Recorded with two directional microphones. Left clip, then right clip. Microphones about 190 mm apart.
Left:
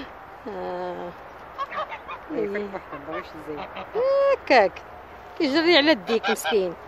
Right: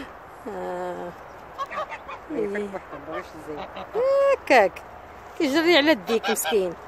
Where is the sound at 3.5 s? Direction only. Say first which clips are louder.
Even; 15° right (ahead or behind).